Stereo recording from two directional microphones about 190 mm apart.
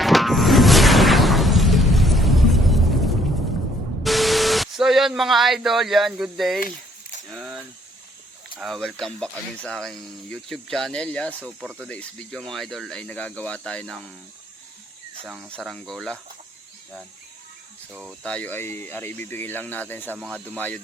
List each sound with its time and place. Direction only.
0.0 s music: centre (ahead or behind)
4.0 s pink noise: centre (ahead or behind)
6.6 s a sound: 45° left (ahead or behind)
7.3 s keys jangling: 5° right (ahead or behind)
8.5 s speech: centre (ahead or behind)
11.4 s speech: 10° right (ahead or behind)
11.9 s speech: 5° left (ahead or behind)
15.2 s speech: 5° right (ahead or behind)
18.2 s speech: 5° left (ahead or behind)
20.1 s speech: centre (ahead or behind)
20.4 s speech: 10° left (ahead or behind)